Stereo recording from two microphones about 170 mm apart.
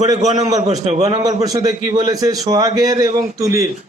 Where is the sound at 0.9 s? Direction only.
40° right (ahead or behind).